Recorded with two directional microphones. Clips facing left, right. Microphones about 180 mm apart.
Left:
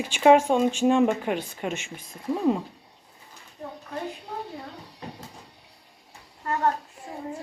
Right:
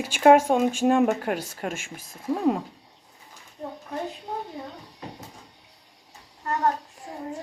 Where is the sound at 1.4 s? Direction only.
50° right (ahead or behind).